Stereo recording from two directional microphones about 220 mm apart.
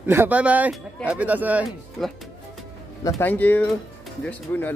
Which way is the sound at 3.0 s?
10° left (ahead or behind).